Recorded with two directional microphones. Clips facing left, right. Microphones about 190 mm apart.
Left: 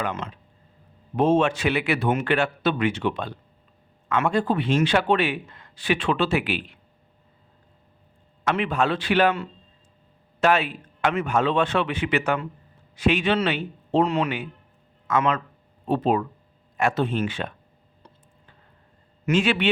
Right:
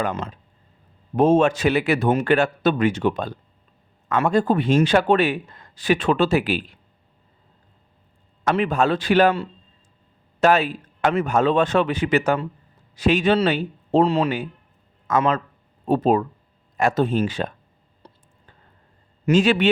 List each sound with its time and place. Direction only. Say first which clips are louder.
0.0 s a man's voice: right 4 dB; 35° right (ahead or behind)
8.4 s a man's voice: right 3 dB; 40° right (ahead or behind)
19.2 s a man's voice: right 4 dB; 40° right (ahead or behind)